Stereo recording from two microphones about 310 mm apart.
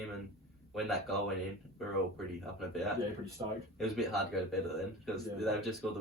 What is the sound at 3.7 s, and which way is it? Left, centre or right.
Speech, centre.